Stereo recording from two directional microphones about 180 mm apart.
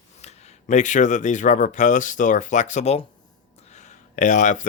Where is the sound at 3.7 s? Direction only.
40° left (ahead or behind).